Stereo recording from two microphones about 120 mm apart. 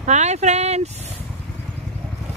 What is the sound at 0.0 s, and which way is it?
Speech, 75° right (ahead or behind).